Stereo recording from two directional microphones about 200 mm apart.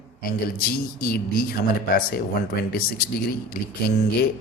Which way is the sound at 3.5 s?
50° left (ahead or behind).